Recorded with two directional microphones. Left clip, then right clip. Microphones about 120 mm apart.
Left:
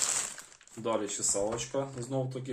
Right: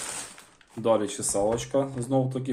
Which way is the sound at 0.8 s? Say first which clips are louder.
Right 8 dB; 45° right (ahead or behind).